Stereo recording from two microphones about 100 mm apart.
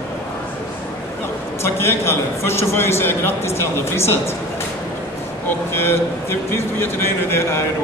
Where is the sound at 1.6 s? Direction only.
25° left (ahead or behind).